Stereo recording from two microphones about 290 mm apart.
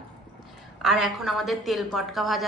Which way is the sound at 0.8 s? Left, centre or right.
Centre.